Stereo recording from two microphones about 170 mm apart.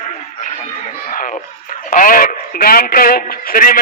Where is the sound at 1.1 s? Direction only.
55° left (ahead or behind).